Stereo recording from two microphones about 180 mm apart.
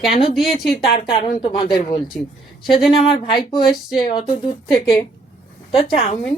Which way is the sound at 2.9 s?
30° left (ahead or behind).